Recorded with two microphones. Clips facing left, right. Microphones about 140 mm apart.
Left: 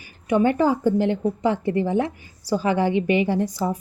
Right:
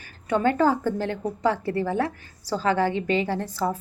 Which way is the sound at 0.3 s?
15° left (ahead or behind).